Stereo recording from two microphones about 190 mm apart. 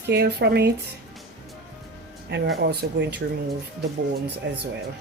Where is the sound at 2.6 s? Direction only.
60° right (ahead or behind).